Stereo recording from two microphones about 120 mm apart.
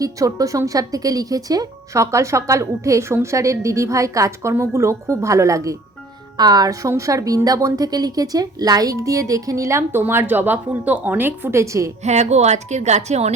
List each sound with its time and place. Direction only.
0.0 s speech: 30° right (ahead or behind)
12.0 s a woman's voice: 70° right (ahead or behind)